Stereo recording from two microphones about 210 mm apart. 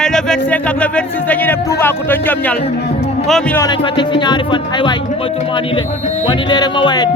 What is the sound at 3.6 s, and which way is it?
Music, 20° left (ahead or behind).